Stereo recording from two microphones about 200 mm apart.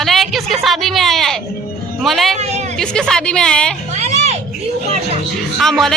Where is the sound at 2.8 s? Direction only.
5° left (ahead or behind).